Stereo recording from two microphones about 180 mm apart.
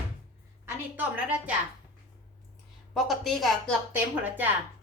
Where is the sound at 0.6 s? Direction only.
10° right (ahead or behind).